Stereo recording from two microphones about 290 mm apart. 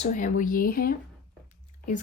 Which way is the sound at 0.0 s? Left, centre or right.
Left.